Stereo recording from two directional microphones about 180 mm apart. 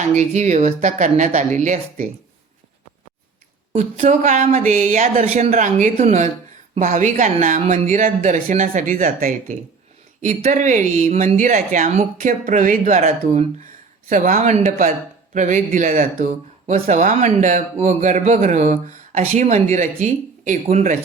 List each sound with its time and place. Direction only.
0.1 s speech: 40° right (ahead or behind)
3.8 s speech: 45° right (ahead or behind)